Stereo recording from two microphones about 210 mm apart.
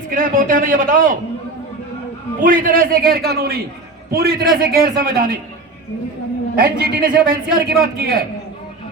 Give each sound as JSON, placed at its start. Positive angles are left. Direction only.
{"t": 0.1, "sound": "a man's voice", "side_deg": -40}
{"t": 2.4, "sound": "a man's voice", "side_deg": -40}
{"t": 6.6, "sound": "a man's voice", "side_deg": -45}